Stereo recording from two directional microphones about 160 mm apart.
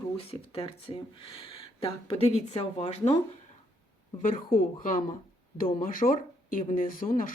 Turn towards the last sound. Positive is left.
turn(degrees=60)  # may be behind; listen again after turning